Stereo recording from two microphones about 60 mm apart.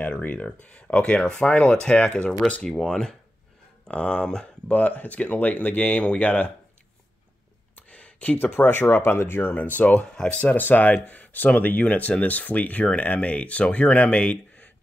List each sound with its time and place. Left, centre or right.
0.2 s speech: left
4.7 s speech: left
7.7 s a sound: left
8.5 s speech: left
10.1 s speech: centre
10.4 s speech: left